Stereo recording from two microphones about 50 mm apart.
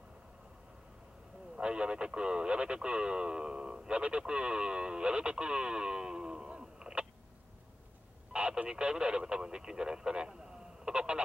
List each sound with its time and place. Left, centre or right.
1.6 s speech: centre
8.3 s speech: right
10.9 s a sound: centre